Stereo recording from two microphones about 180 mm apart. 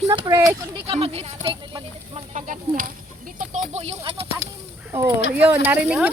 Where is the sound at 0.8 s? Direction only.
30° right (ahead or behind).